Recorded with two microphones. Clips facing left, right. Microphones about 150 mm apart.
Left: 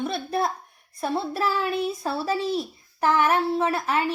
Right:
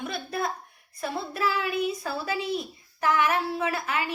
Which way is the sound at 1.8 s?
30° left (ahead or behind).